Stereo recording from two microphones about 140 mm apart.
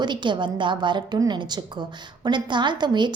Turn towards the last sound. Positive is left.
turn(degrees=-30)  # may be behind; listen again after turning